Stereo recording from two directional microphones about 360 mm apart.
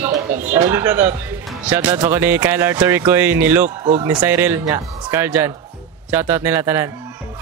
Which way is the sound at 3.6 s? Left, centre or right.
Centre.